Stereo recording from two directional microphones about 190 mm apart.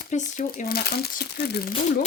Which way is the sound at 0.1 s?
40° left (ahead or behind).